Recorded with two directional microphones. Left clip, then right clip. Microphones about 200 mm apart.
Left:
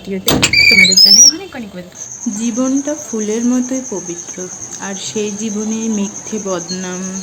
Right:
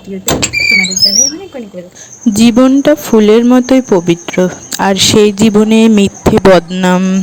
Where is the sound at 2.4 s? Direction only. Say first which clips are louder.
Right 10 dB; 50° right (ahead or behind).